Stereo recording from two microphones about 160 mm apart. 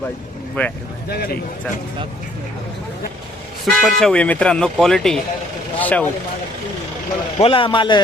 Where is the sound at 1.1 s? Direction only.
75° left (ahead or behind).